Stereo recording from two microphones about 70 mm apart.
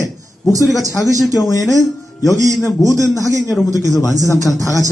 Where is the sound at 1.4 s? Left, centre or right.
Left.